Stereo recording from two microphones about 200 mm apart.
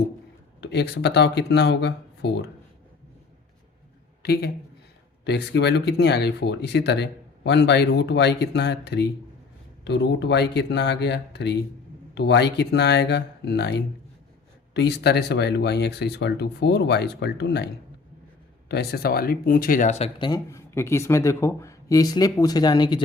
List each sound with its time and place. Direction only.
0.6 s speech: 55° left (ahead or behind)
4.2 s speech: 50° left (ahead or behind)
18.7 s speech: 50° left (ahead or behind); by 23.0 s 20° left (ahead or behind)